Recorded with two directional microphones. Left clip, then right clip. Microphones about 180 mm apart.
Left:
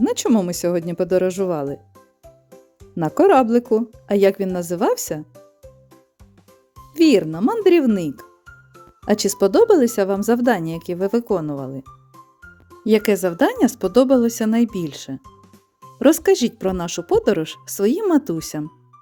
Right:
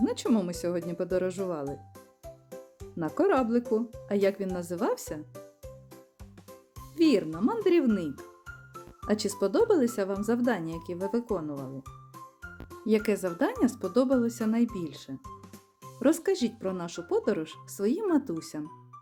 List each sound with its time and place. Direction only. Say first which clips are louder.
0.0 s speech: left 9 dB; 50° left (ahead or behind)
2.9 s speech: left 12 dB; 50° left (ahead or behind)
6.9 s speech: left 10 dB; 45° left (ahead or behind)
11.8 s music: left 5 dB; centre (ahead or behind)
12.8 s speech: left 10 dB; 50° left (ahead or behind)